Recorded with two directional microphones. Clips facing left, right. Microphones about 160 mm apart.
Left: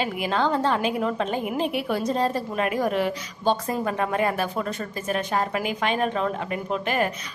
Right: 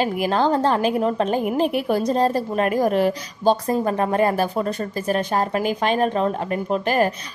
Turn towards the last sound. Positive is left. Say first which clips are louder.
# right 5 dB
turn(degrees=-35)  # may be behind; listen again after turning